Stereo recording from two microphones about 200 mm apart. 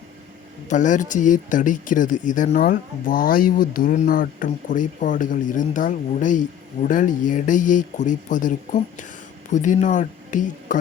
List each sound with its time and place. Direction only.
0.7 s speech: 40° left (ahead or behind)